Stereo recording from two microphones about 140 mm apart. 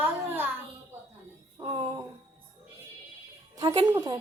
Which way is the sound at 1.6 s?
35° right (ahead or behind).